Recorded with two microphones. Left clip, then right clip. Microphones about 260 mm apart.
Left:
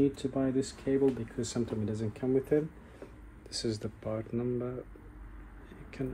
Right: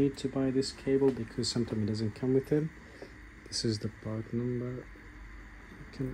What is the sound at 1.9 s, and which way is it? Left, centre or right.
Speech, right.